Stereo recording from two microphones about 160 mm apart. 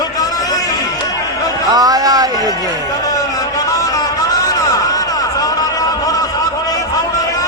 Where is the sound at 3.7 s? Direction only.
20° left (ahead or behind).